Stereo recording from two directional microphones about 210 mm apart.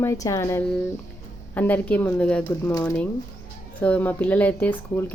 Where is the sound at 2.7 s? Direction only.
15° left (ahead or behind).